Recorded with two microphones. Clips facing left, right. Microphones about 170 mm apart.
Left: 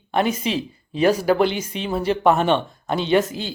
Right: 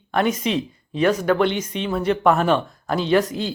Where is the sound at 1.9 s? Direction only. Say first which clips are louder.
Even; 30° left (ahead or behind).